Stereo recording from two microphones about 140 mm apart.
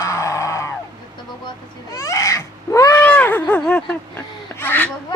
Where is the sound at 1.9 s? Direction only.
20° left (ahead or behind).